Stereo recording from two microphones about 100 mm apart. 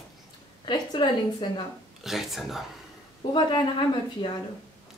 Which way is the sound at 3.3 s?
50° left (ahead or behind).